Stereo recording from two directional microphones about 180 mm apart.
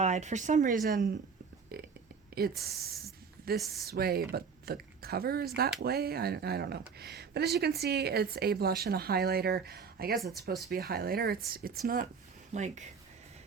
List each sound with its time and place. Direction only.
0.0 s speech: 40° right (ahead or behind)
12.5 s speech: 40° right (ahead or behind)